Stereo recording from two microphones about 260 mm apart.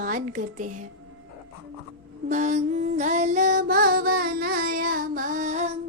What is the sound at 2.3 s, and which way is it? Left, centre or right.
Music, right.